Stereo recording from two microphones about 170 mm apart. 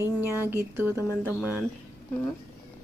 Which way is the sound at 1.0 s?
15° left (ahead or behind).